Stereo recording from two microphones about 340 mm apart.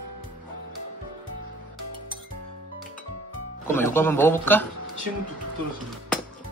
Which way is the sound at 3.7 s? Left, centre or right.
Centre.